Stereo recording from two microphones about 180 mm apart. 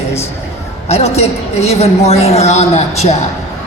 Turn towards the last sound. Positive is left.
turn(degrees=40)  # may be behind; listen again after turning